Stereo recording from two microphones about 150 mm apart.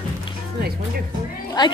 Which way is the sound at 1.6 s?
30° left (ahead or behind).